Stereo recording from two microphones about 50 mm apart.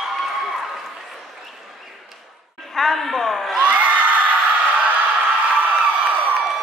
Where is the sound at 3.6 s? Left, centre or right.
Right.